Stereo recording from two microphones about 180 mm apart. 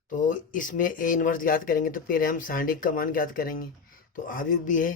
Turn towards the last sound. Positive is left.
turn(degrees=45)  # may be behind; listen again after turning